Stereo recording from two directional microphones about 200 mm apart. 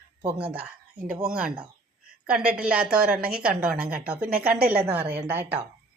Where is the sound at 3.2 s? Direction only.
45° right (ahead or behind).